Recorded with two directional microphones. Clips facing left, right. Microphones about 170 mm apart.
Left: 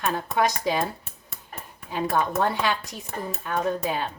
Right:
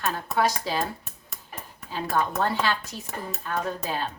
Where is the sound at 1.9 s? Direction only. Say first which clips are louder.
Left 2 dB; 15° left (ahead or behind).